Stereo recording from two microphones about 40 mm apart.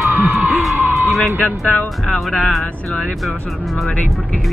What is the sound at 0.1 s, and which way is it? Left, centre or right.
Music, right.